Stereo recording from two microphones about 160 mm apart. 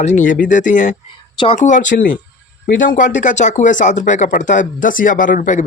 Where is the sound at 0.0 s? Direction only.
50° left (ahead or behind).